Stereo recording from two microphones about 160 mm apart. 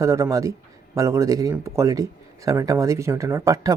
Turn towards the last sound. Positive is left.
turn(degrees=-20)  # may be behind; listen again after turning